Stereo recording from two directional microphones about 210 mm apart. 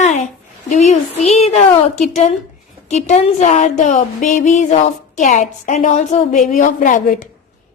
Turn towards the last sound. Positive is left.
turn(degrees=40)  # may be behind; listen again after turning